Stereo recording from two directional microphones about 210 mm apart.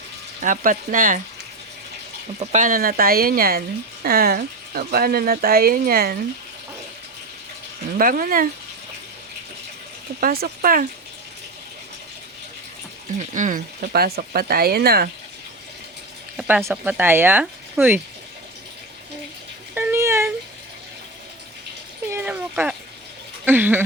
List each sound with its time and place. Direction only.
0.4 s speech: 40° right (ahead or behind)
2.4 s speech: 35° right (ahead or behind)
7.9 s speech: 40° right (ahead or behind)
10.2 s speech: 45° right (ahead or behind)
13.1 s speech: 35° right (ahead or behind)
16.4 s speech: 5° right (ahead or behind)
19.7 s a sound: 10° right (ahead or behind)
22.1 s a sound: 10° right (ahead or behind)
23.5 s speech: 10° right (ahead or behind)